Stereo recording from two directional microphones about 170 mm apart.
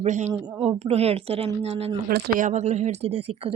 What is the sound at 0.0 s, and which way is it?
Speech, 40° right (ahead or behind).